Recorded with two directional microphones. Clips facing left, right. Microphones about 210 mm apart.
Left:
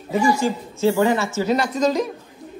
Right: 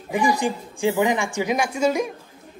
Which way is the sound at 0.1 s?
15° right (ahead or behind).